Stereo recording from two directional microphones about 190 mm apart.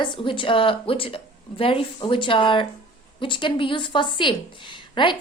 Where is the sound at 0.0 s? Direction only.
25° left (ahead or behind).